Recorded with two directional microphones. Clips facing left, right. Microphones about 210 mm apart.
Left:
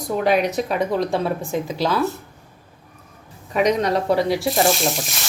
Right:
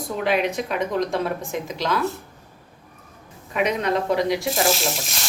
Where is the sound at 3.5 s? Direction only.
35° left (ahead or behind).